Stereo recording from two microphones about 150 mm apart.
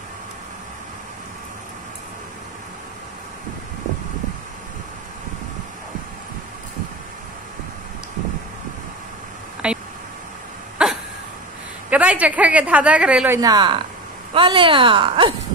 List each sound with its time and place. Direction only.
9.6 s a sound: 5° right (ahead or behind)
10.8 s cough: 5° right (ahead or behind)
11.9 s a woman's voice: 10° right (ahead or behind)
13.4 s speech: 25° right (ahead or behind)